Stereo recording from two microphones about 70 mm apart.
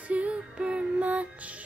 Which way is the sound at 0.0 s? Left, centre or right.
Centre.